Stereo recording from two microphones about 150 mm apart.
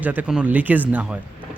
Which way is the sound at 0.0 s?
10° right (ahead or behind).